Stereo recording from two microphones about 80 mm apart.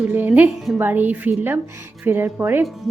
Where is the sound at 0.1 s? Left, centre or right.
Right.